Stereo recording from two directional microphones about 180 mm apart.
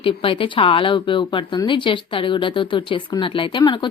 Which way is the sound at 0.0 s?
30° left (ahead or behind).